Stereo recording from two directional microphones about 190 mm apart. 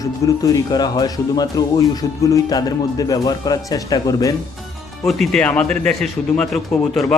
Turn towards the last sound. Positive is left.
turn(degrees=0)  # may be behind; listen again after turning